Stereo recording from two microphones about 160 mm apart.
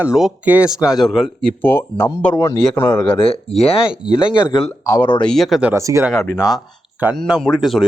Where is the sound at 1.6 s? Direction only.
10° left (ahead or behind).